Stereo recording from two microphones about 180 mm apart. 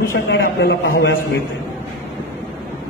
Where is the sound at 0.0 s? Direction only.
60° left (ahead or behind).